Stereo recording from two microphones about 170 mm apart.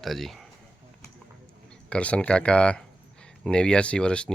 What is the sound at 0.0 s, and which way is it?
Speech, centre (ahead or behind).